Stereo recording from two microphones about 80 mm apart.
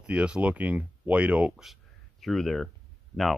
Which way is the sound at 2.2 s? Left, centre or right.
Centre.